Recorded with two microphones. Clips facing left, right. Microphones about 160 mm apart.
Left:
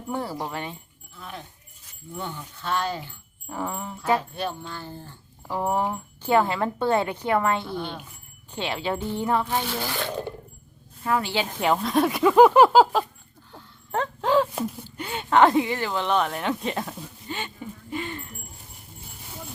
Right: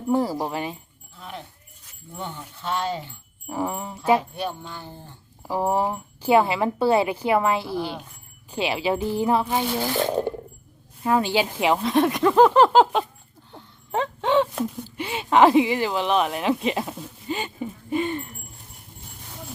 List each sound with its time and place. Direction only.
0.1 s speech: 10° right (ahead or behind)
2.1 s speech: 15° right (ahead or behind)
10.0 s speech: 40° right (ahead or behind)
11.0 s speech: 15° right (ahead or behind); by 13.1 s centre (ahead or behind)
13.9 s a sound: centre (ahead or behind); by 18.2 s 20° right (ahead or behind)